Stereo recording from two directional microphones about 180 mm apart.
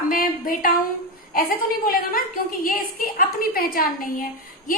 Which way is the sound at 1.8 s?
50° left (ahead or behind).